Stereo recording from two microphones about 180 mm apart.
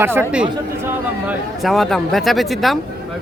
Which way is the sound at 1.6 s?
Centre (ahead or behind).